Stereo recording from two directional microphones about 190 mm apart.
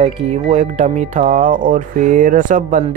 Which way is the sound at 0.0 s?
35° right (ahead or behind).